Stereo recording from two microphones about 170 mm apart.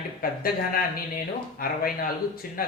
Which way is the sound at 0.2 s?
60° left (ahead or behind).